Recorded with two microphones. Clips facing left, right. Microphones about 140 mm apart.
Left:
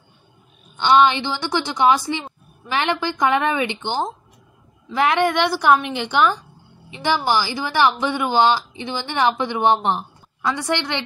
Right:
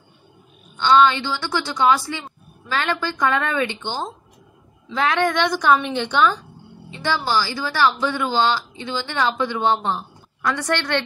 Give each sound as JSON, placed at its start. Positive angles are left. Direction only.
{"t": 0.7, "sound": "speech", "side_deg": 15}